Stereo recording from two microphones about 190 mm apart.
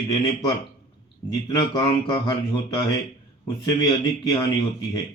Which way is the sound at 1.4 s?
20° left (ahead or behind).